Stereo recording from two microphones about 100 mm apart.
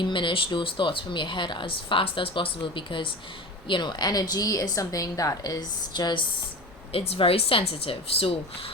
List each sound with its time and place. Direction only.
0.0 s speech: 55° left (ahead or behind)
3.7 s a woman's voice: 45° left (ahead or behind)
6.9 s speech: 80° left